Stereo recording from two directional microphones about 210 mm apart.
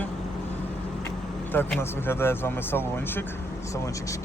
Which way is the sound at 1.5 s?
10° left (ahead or behind).